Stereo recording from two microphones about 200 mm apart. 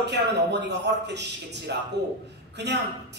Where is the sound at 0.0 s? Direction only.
60° right (ahead or behind).